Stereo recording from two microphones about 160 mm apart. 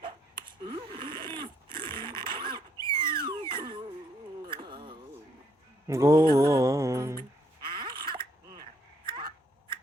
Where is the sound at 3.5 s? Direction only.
30° right (ahead or behind).